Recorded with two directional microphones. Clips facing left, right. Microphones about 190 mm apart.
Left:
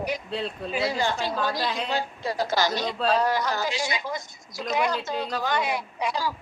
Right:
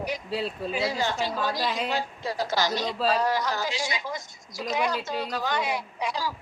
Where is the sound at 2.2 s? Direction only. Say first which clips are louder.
Left 3 dB; 55° left (ahead or behind).